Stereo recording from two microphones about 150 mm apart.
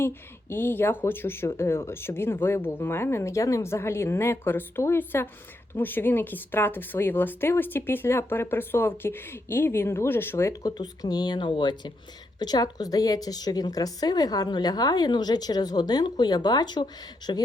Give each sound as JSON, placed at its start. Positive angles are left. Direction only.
{"t": 0.5, "sound": "speech", "side_deg": 15}
{"t": 10.7, "sound": "a woman's voice", "side_deg": 25}